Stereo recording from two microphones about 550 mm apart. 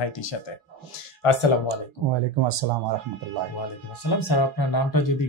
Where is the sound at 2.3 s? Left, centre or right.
Right.